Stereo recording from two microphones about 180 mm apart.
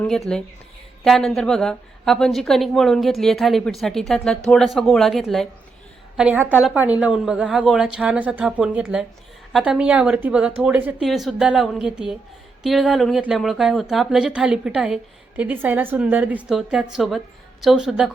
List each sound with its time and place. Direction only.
0.3 s speech: 5° left (ahead or behind)